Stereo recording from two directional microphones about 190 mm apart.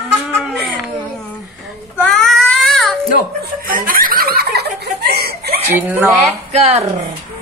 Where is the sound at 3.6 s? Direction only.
50° right (ahead or behind).